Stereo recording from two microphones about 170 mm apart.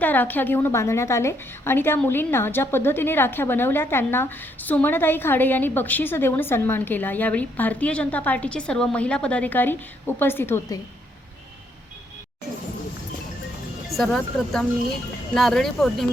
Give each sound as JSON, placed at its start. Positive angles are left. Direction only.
{"t": 0.0, "sound": "a woman's voice", "side_deg": 10}
{"t": 13.9, "sound": "speech", "side_deg": 0}